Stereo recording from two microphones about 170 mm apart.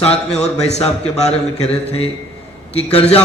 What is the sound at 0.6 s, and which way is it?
A man's voice, 40° left (ahead or behind).